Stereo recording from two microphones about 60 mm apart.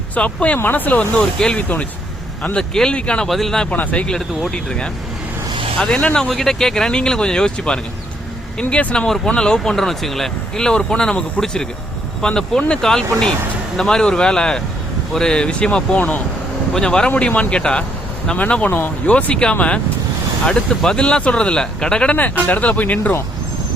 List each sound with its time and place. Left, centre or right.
0.1 s speech: left
3.2 s speech: centre
3.7 s speech: left
4.5 s speech: centre
16.0 s speech: left
16.7 s speech: centre
22.1 s speech: left